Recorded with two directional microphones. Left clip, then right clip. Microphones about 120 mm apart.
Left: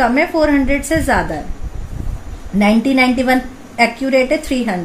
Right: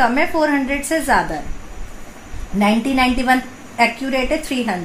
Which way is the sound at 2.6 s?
85° left.